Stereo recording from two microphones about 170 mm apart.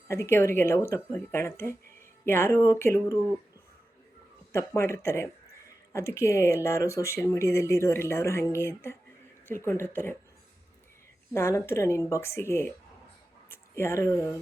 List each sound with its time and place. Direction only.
0.1 s speech: 15° left (ahead or behind)
4.5 s speech: 15° left (ahead or behind)
11.3 s speech: 15° left (ahead or behind)